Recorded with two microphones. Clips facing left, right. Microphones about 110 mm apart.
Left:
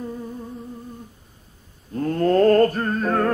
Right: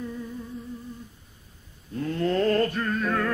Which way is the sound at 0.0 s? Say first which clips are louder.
Left 3 dB; 40° left (ahead or behind).